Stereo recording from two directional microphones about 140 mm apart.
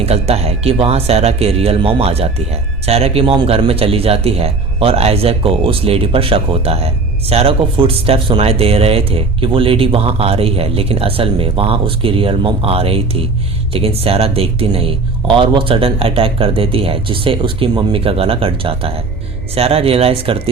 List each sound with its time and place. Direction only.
0.0 s speech: 45° right (ahead or behind)